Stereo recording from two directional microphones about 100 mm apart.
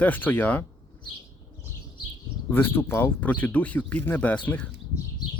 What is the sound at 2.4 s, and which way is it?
Speech, 20° left (ahead or behind).